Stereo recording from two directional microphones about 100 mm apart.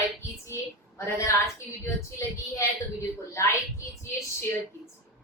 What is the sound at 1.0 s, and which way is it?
Speech, 30° left (ahead or behind).